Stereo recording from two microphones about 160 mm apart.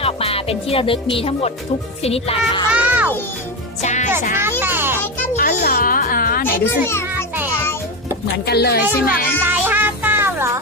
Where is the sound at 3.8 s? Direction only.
50° left (ahead or behind).